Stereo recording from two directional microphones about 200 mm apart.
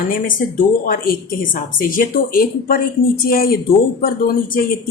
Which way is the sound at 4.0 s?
45° left (ahead or behind).